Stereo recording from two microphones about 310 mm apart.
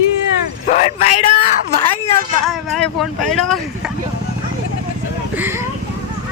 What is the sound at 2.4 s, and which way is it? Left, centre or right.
Speech, centre.